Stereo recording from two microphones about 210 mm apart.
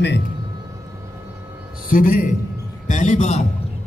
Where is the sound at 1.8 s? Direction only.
40° left (ahead or behind).